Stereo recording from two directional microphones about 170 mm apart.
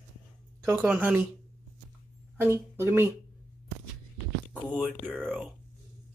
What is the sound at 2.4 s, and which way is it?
Speech, 15° right (ahead or behind).